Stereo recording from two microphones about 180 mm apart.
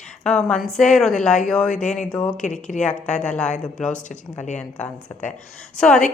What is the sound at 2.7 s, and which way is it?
Speech, 50° left (ahead or behind).